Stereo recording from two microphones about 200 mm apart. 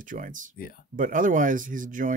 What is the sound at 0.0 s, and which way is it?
Speech, 40° right (ahead or behind).